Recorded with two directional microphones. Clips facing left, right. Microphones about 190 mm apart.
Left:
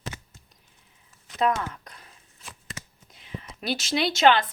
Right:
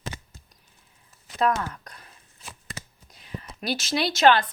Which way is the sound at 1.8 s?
20° left (ahead or behind).